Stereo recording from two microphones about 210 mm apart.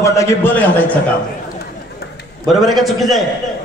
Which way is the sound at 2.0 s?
50° left (ahead or behind).